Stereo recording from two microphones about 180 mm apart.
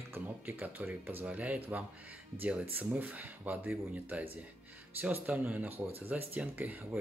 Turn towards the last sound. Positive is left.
turn(degrees=-10)  # may be behind; listen again after turning